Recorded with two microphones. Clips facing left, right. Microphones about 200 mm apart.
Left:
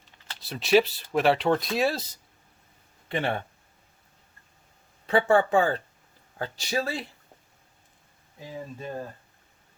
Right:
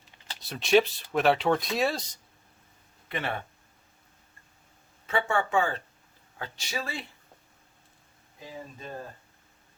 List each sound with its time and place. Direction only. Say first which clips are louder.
0.3 s speech: left 1 dB; centre (ahead or behind)
3.1 s speech: left 5 dB; 30° left (ahead or behind)
5.0 s speech: left 7 dB; 35° left (ahead or behind)